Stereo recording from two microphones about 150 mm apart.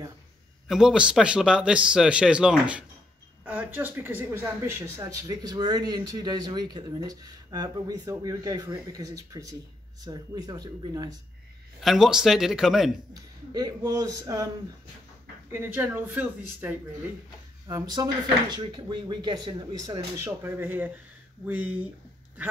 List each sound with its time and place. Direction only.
0.7 s speech: 5° right (ahead or behind); by 11.1 s 25° right (ahead or behind)
11.8 s speech: centre (ahead or behind)
13.1 s speech: 25° right (ahead or behind)
15.5 s speech: 15° right (ahead or behind)
17.6 s speech: 25° right (ahead or behind)
20.2 s speech: 15° right (ahead or behind)